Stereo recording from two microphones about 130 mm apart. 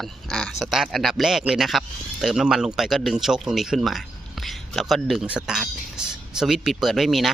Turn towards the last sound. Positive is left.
turn(degrees=0)  # may be behind; listen again after turning